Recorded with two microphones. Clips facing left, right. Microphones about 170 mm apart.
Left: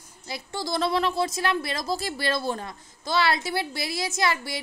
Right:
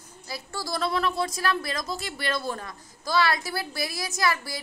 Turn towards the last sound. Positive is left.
turn(degrees=25)  # may be behind; listen again after turning